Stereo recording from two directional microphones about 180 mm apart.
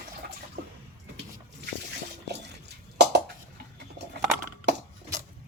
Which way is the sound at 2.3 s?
70° right (ahead or behind).